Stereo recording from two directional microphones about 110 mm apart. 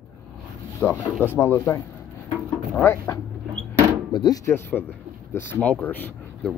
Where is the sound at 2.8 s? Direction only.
20° left (ahead or behind).